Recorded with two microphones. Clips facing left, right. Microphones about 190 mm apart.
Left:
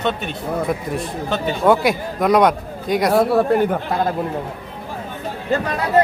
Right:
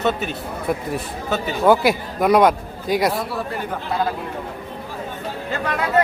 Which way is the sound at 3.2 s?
60° left (ahead or behind).